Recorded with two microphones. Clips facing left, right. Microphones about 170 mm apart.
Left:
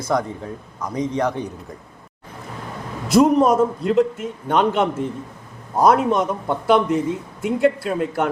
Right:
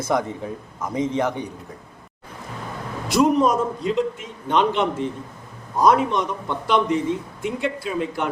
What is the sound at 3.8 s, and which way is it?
A man's voice, 50° left (ahead or behind).